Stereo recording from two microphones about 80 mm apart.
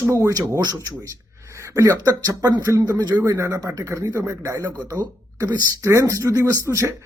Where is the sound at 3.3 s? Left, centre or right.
Right.